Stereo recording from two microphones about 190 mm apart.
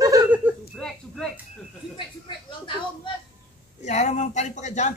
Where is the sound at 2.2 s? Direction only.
25° left (ahead or behind).